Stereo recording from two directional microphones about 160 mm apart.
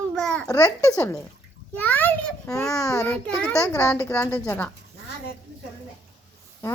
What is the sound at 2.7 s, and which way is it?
Speech, 20° left (ahead or behind).